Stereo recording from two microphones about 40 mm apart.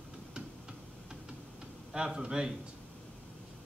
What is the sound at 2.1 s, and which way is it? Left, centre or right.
Speech, centre.